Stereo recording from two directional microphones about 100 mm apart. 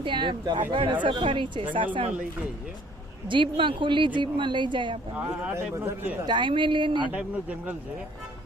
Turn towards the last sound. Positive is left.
turn(degrees=-15)  # may be behind; listen again after turning